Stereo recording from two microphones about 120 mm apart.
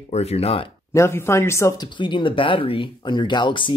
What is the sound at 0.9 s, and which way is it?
Speech, 20° left (ahead or behind).